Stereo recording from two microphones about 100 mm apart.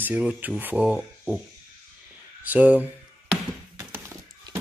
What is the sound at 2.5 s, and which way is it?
Speech, 15° right (ahead or behind).